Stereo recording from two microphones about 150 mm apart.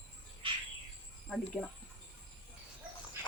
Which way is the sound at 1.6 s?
10° left (ahead or behind).